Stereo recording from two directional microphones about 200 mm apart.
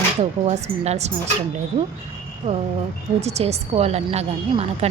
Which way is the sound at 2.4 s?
25° right (ahead or behind).